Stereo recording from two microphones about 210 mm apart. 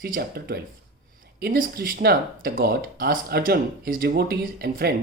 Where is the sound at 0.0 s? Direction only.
45° right (ahead or behind).